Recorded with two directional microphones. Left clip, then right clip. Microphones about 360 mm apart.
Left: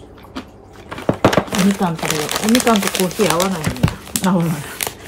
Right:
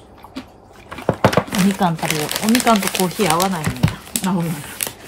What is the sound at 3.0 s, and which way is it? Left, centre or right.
Speech, right.